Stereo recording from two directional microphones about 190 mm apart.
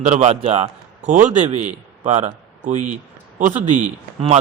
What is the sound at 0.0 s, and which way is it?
A man's voice, 35° right (ahead or behind).